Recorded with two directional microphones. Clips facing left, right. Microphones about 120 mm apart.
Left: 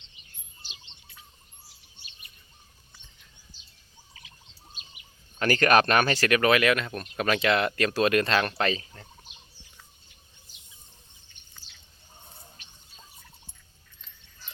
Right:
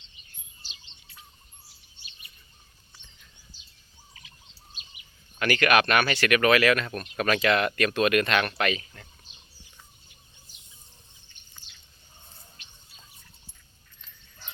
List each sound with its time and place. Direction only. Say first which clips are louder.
5.4 s speech: left 1 dB; 35° left (ahead or behind)